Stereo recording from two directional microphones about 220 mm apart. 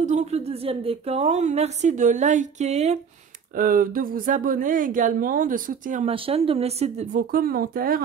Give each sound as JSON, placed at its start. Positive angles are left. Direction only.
{"t": 0.0, "sound": "speech", "side_deg": -30}